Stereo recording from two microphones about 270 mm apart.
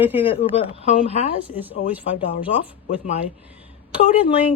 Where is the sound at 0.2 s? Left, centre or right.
Left.